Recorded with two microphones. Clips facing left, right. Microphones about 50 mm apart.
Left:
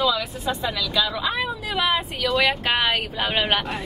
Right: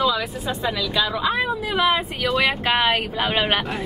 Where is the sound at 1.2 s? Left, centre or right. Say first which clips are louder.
Right 4 dB; centre.